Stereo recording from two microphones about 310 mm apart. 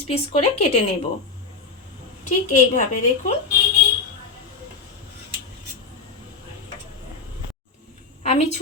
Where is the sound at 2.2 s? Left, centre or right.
Left.